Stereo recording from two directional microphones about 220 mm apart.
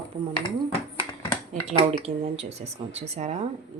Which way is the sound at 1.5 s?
30° right (ahead or behind).